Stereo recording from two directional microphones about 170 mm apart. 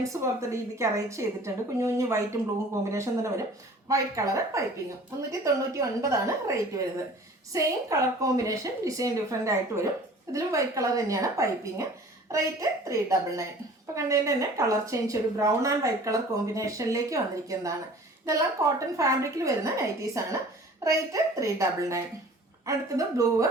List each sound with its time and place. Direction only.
0.0 s a woman's voice: 20° right (ahead or behind)